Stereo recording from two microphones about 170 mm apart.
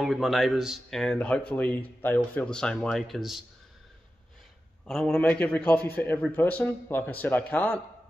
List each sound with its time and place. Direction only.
0.0 s speech: centre (ahead or behind)
4.8 s a man's voice: 5° left (ahead or behind)